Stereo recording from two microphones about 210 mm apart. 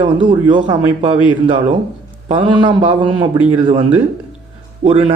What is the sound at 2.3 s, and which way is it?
Speech, 25° right (ahead or behind).